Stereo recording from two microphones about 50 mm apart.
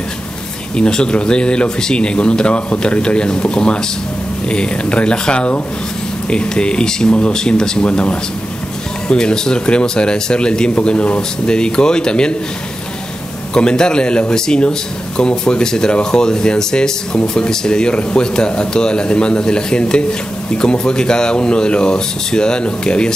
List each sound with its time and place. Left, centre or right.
0.7 s speech: centre
13.5 s speech: centre